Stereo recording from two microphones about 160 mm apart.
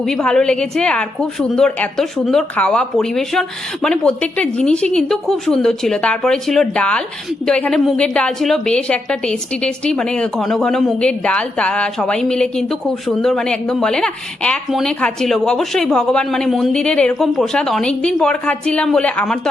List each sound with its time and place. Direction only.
0.0 s a woman's voice: 5° left (ahead or behind)